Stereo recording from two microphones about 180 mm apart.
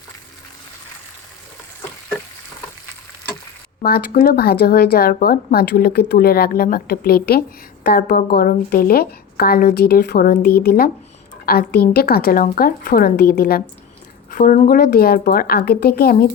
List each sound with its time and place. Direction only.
3.8 s speech: 55° left (ahead or behind)